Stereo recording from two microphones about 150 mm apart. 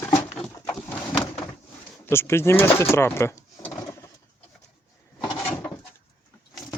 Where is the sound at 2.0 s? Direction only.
15° left (ahead or behind).